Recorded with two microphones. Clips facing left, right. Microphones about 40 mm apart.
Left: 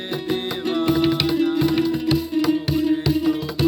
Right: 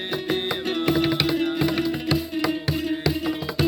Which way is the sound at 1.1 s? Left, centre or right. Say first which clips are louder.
Left 3 dB; right.